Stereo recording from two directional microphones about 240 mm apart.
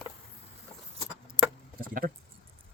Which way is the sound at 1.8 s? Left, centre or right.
Right.